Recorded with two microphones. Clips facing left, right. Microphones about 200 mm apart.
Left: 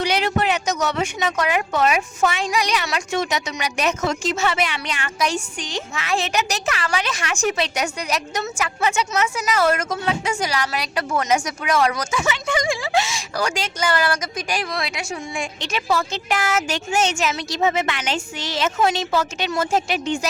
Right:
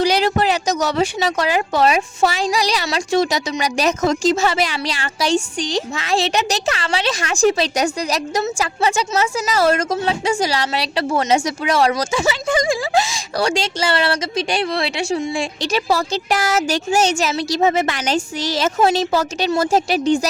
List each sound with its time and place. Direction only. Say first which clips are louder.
0.0 s speech: right 4 dB; 35° right (ahead or behind)